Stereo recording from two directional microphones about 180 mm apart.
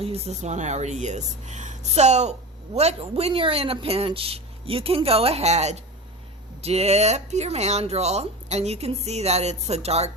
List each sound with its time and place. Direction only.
0.0 s speech: 35° right (ahead or behind)